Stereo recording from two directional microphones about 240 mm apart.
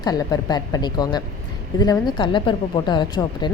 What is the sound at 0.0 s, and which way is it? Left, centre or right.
Speech, centre.